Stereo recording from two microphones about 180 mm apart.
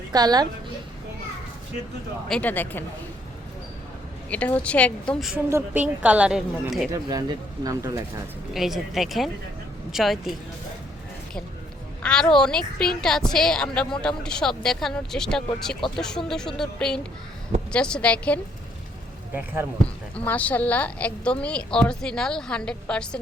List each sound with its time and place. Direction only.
0.1 s a woman's voice: 20° right (ahead or behind)
2.3 s speech: 10° left (ahead or behind)
4.3 s speech: 10° left (ahead or behind)
5.3 s a woman's voice: 10° right (ahead or behind)
6.9 s speech: 20° right (ahead or behind)
8.5 s a woman's voice: centre (ahead or behind)
12.0 s a woman's voice: 5° left (ahead or behind)
19.3 s a woman's voice: 10° right (ahead or behind)
20.1 s a woman's voice: 10° left (ahead or behind)